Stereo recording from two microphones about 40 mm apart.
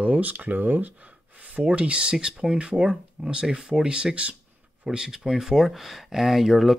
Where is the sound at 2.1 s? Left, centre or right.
Centre; by 4.4 s right.